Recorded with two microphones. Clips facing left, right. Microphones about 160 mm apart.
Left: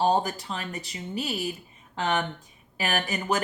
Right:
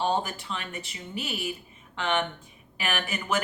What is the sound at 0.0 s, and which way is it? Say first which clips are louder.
Speech: left 4 dB; 40° left (ahead or behind).